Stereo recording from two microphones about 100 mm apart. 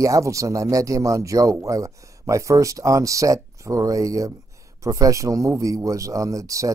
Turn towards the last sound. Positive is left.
turn(degrees=-35)  # may be behind; listen again after turning